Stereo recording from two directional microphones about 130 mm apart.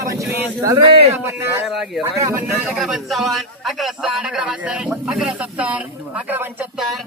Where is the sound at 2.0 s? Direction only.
20° right (ahead or behind).